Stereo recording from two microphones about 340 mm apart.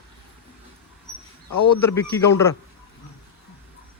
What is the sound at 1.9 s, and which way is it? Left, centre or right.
Speech, centre.